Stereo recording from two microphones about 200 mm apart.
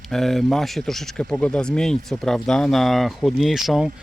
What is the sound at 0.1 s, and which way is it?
Speech, centre (ahead or behind).